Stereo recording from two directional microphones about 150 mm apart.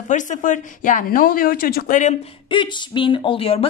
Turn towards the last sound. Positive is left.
turn(degrees=40)  # may be behind; listen again after turning